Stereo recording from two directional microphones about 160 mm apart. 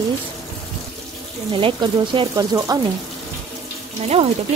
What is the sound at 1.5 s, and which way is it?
Speech, 30° right (ahead or behind).